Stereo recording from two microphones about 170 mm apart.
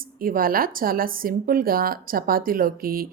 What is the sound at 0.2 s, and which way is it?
Speech, 55° right (ahead or behind).